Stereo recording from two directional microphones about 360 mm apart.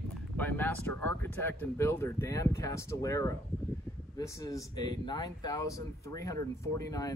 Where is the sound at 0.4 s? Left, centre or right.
Centre.